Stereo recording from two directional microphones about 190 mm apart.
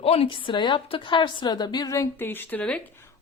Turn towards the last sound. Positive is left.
turn(degrees=10)  # may be behind; listen again after turning